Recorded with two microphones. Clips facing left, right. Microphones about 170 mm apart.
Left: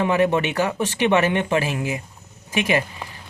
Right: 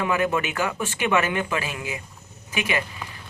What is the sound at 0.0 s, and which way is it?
Speech, 30° left (ahead or behind).